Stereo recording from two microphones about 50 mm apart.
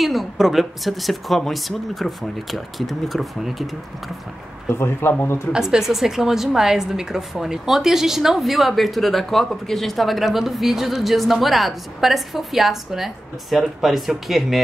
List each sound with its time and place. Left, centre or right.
0.0 s a woman's voice: centre
4.6 s a man's voice: left
5.5 s a woman's voice: centre